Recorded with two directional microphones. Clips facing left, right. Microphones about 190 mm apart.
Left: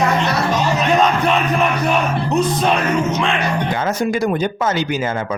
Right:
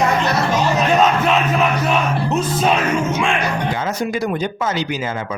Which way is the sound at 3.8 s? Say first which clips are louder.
Left 3 dB; 50° left (ahead or behind).